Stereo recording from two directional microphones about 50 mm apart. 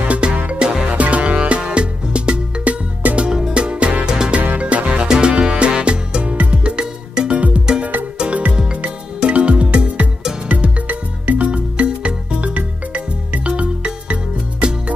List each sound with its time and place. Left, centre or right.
0.0 s music: right
0.7 s music: centre
0.9 s music: right
3.2 s music: centre
6.6 s music: centre